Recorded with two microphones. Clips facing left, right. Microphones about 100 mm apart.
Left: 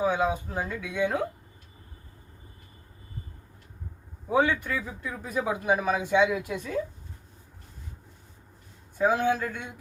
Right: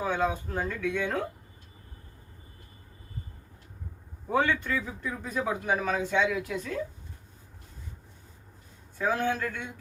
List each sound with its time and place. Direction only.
0.0 s a man's voice: 15° left (ahead or behind)
4.3 s a man's voice: 10° left (ahead or behind)
9.0 s a man's voice: 15° left (ahead or behind)